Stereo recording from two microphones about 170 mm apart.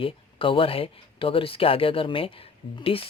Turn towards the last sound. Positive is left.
turn(degrees=35)  # may be behind; listen again after turning